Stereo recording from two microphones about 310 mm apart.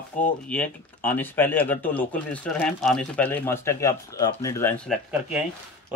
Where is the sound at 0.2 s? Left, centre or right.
Left.